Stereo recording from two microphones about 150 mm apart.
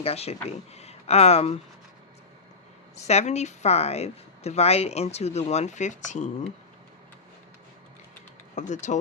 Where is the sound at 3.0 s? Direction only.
45° left (ahead or behind).